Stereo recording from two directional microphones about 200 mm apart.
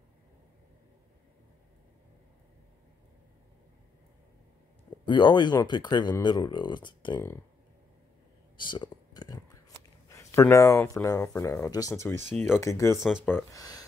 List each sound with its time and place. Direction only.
5.0 s speech: 25° left (ahead or behind)
8.5 s whispering: 25° left (ahead or behind)
10.0 s speech: 15° left (ahead or behind)
13.0 s speech: centre (ahead or behind)
13.5 s speech: 20° left (ahead or behind)